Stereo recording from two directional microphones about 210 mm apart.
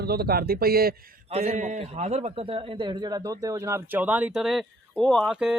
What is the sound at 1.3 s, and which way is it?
A man's voice, 30° right (ahead or behind).